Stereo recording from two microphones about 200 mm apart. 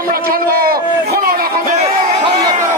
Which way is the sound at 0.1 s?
45° right (ahead or behind).